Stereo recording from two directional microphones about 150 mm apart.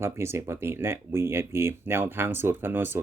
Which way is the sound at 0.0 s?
15° right (ahead or behind).